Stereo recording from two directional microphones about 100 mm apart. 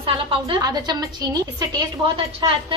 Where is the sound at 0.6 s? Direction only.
40° right (ahead or behind).